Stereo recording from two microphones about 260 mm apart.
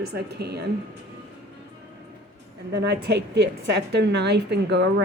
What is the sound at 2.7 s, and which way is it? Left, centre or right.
A woman's voice, right.